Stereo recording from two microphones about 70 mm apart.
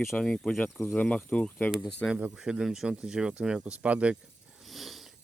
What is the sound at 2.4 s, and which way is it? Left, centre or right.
Speech, centre.